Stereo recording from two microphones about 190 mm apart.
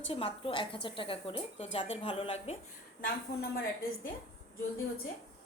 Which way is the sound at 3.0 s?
50° left (ahead or behind).